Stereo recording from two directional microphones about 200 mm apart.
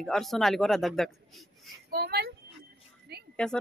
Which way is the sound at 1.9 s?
55° right (ahead or behind).